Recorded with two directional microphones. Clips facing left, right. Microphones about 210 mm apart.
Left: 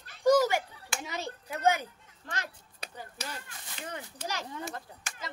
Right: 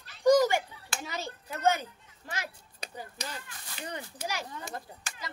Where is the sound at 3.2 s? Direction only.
5° left (ahead or behind); by 4.4 s 10° right (ahead or behind).